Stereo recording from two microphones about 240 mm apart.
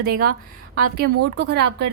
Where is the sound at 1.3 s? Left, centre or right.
Right.